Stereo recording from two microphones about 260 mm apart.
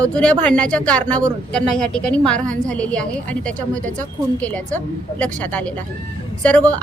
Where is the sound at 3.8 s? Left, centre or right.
Right.